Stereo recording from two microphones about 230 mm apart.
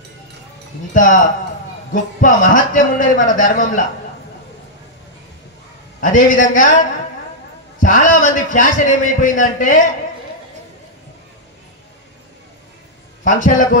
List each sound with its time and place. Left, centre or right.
0.9 s a man's voice: left
5.9 s a man's voice: left
13.2 s a man's voice: left